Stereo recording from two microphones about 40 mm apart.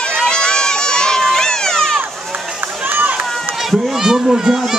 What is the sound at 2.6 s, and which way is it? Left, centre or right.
Run, right.